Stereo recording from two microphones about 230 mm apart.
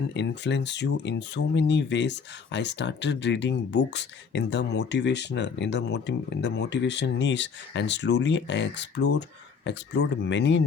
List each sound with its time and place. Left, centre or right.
0.1 s speech: left